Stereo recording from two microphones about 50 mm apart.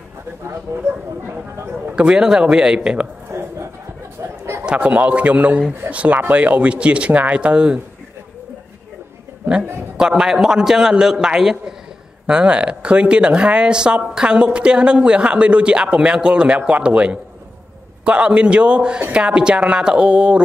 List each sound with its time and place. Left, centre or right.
0.7 s speech: right
2.0 s a man's voice: centre
3.3 s a sound: right
4.2 s chatter: right
4.7 s speech: right
9.9 s a man's voice: centre